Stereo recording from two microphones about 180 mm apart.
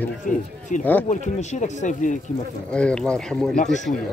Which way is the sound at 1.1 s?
40° left (ahead or behind).